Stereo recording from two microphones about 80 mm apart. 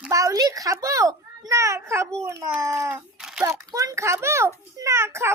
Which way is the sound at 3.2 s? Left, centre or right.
Centre.